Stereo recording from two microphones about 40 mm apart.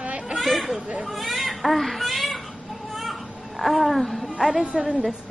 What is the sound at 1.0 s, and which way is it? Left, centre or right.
Baby cry, centre.